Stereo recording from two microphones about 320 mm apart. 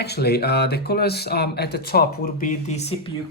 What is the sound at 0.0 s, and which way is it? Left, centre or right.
Speech, left.